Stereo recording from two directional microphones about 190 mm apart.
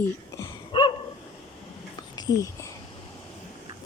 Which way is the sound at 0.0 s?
15° left (ahead or behind).